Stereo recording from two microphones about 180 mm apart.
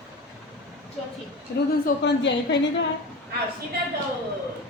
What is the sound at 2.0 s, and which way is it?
Speech, 75° left (ahead or behind).